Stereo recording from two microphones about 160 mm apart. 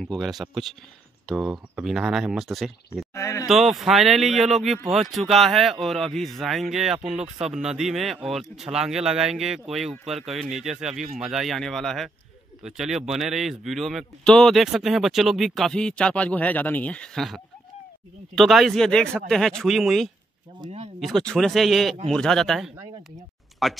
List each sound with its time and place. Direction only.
0.0 s speech: centre (ahead or behind)
3.2 s speech: 15° left (ahead or behind)
3.4 s speech: centre (ahead or behind)